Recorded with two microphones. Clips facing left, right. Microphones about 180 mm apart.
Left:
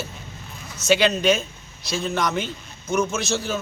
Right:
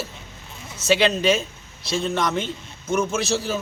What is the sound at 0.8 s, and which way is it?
A man's voice, centre (ahead or behind).